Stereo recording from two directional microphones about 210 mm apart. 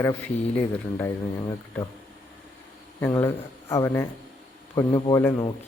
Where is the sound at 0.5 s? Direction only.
10° left (ahead or behind).